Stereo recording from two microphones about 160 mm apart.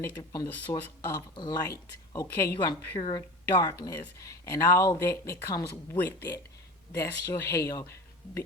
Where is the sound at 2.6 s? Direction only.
30° left (ahead or behind).